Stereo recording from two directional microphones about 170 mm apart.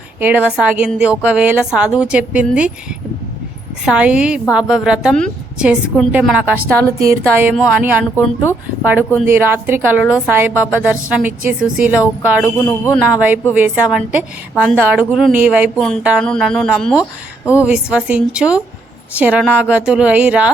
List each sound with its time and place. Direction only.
0.2 s a woman's voice: 10° right (ahead or behind)
3.8 s a woman's voice: 5° right (ahead or behind)
7.5 s a woman's voice: centre (ahead or behind)
12.4 s speech: 15° left (ahead or behind)
13.0 s a woman's voice: 10° right (ahead or behind)
17.4 s a woman's voice: 15° left (ahead or behind)
17.7 s a woman's voice: 5° right (ahead or behind)